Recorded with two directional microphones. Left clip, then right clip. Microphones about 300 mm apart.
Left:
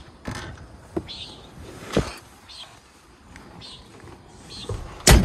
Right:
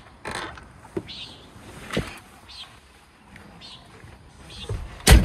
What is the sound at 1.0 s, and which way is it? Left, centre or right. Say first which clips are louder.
Speech: left 1 dB; left.